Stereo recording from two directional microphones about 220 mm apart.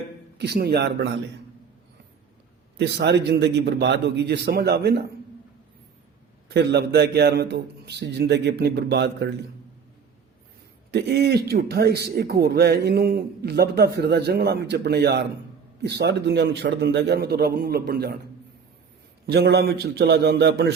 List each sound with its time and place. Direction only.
0.3 s a man's voice: 50° right (ahead or behind)
2.7 s a man's voice: 50° right (ahead or behind)
6.5 s a man's voice: 50° right (ahead or behind)
10.9 s a man's voice: 50° right (ahead or behind)
19.2 s a man's voice: 45° right (ahead or behind)